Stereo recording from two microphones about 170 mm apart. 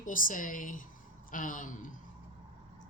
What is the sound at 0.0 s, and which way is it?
Speech, 50° left (ahead or behind).